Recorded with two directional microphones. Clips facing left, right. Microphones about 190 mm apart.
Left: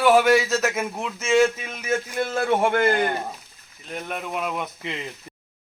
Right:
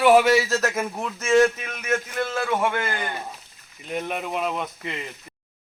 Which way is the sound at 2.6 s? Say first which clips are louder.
Left 6 dB; 50° left (ahead or behind).